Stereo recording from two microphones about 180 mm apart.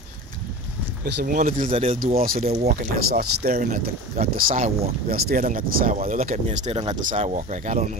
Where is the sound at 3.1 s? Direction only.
60° right (ahead or behind).